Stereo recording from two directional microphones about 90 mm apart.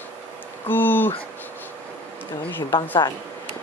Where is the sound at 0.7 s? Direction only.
20° left (ahead or behind).